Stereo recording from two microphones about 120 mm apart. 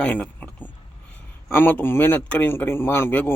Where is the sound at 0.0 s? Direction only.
10° left (ahead or behind).